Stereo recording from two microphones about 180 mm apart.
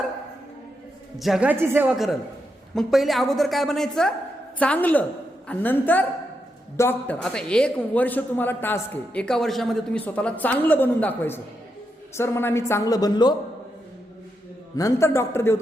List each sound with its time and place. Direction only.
1.2 s a woman's voice: 5° right (ahead or behind); by 13.3 s 20° left (ahead or behind)
14.8 s a man's voice: 15° left (ahead or behind)